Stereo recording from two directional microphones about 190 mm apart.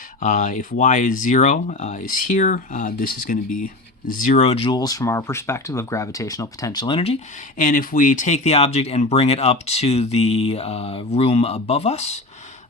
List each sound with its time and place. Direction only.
0.2 s speech: 40° left (ahead or behind)
7.6 s speech: 45° left (ahead or behind)